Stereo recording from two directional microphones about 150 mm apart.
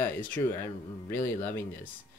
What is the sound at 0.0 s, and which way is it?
Speech, 10° left (ahead or behind).